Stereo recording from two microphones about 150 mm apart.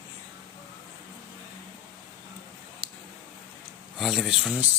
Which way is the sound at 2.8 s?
90° right.